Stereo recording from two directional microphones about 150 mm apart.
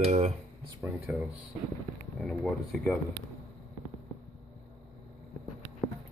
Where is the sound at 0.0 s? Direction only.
50° right (ahead or behind).